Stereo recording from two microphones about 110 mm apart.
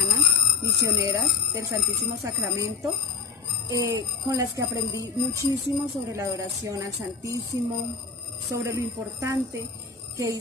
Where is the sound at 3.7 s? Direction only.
30° right (ahead or behind).